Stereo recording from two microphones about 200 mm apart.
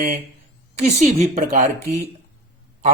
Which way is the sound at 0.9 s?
35° right (ahead or behind).